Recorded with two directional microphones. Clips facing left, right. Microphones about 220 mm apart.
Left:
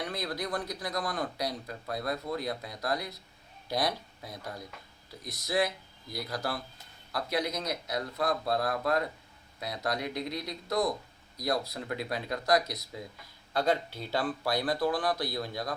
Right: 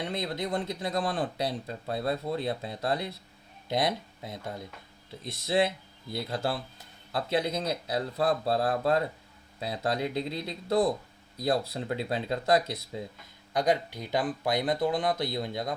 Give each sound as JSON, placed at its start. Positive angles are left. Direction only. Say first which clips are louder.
{"t": 0.0, "sound": "speech", "louder": "right 3 dB", "side_deg": -25}
{"t": 13.5, "sound": "speech", "louder": "right 2 dB", "side_deg": -15}